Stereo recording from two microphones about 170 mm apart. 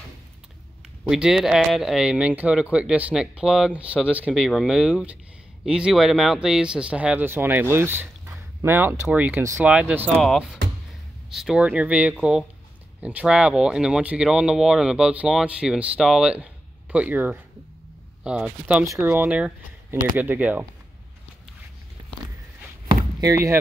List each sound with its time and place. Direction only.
1.0 s speech: 5° right (ahead or behind)
23.2 s speech: 20° right (ahead or behind)